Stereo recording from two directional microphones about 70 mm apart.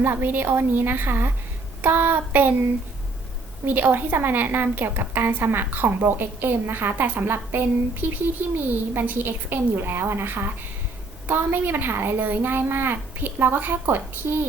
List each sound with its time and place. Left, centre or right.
0.0 s a woman's voice: right
3.7 s a woman's voice: right